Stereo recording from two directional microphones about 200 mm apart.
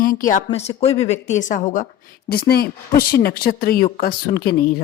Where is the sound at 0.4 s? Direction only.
30° left (ahead or behind).